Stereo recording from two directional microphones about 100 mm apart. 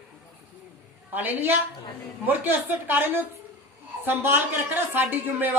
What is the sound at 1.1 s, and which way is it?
Speech, 20° right (ahead or behind).